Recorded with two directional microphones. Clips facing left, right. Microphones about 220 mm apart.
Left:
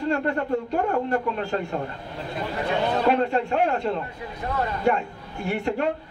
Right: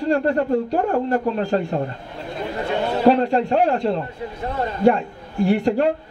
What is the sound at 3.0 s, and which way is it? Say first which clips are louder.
Speech: right 9 dB; 35° right (ahead or behind).